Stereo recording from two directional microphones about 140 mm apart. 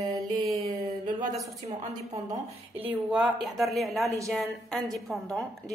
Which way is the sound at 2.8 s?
10° right (ahead or behind).